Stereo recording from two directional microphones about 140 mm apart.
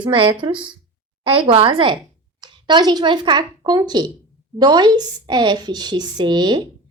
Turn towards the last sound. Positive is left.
turn(degrees=-30)  # may be behind; listen again after turning